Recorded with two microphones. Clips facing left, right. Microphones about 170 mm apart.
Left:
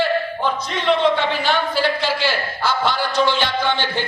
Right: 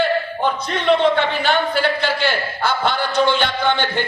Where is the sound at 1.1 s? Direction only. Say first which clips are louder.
Right 1 dB; 55° right (ahead or behind).